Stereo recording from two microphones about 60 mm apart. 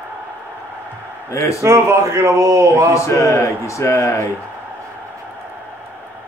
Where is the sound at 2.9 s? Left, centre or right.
Left.